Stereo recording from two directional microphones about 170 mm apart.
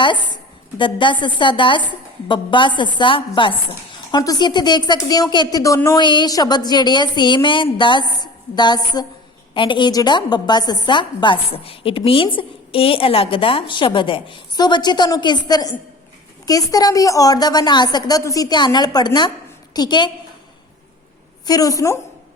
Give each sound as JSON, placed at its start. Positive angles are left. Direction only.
{"t": 0.8, "sound": "speech", "side_deg": 30}
{"t": 21.4, "sound": "speech", "side_deg": 20}